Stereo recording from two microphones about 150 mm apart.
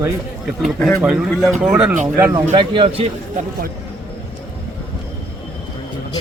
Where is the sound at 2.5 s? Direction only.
35° right (ahead or behind).